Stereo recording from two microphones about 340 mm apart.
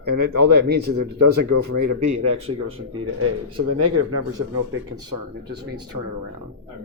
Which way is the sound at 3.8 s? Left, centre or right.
Right.